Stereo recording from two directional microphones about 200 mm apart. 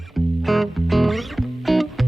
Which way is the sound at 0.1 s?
Centre (ahead or behind).